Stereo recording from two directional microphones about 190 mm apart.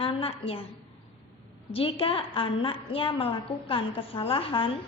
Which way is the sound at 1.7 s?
30° left (ahead or behind).